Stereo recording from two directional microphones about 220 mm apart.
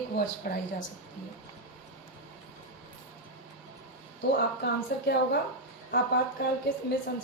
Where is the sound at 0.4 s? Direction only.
40° left (ahead or behind).